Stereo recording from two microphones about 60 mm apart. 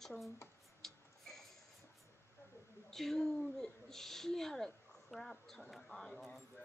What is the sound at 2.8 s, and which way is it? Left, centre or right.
A woman's voice, centre.